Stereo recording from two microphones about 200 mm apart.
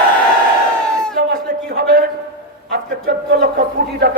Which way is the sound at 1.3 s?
50° right (ahead or behind).